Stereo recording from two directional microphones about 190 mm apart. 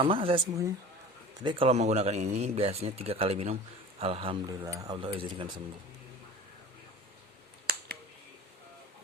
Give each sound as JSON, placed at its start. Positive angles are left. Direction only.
{"t": 0.0, "sound": "speech", "side_deg": -30}
{"t": 1.5, "sound": "speech", "side_deg": -30}